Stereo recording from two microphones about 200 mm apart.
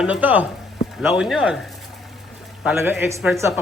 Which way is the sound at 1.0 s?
Centre (ahead or behind).